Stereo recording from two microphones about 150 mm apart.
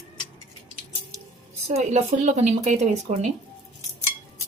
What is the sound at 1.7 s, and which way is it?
Speech, 45° right (ahead or behind).